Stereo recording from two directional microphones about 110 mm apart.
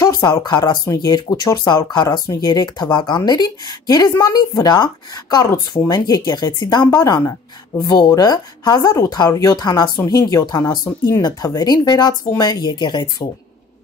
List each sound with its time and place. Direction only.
0.0 s speech: 35° left (ahead or behind)